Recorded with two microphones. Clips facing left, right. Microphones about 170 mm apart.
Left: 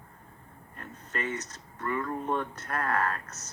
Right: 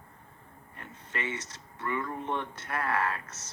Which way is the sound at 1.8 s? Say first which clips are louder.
Left 2 dB; 45° left (ahead or behind).